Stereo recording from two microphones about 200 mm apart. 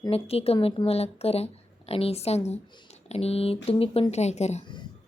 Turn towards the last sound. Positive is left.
turn(degrees=35)  # may be behind; listen again after turning